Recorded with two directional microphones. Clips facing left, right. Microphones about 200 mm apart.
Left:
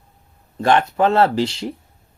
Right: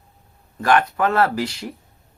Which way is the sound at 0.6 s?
25° left (ahead or behind).